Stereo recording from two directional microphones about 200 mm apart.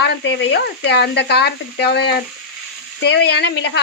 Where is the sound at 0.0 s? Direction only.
60° left (ahead or behind).